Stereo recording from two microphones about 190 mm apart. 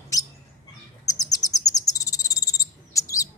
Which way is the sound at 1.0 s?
20° left (ahead or behind).